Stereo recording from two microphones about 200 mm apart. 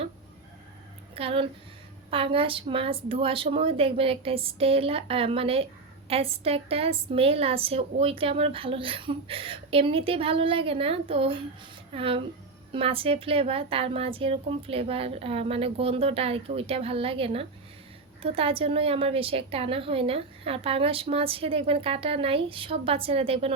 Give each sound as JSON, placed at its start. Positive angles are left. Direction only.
{"t": 1.1, "sound": "a woman's voice", "side_deg": -25}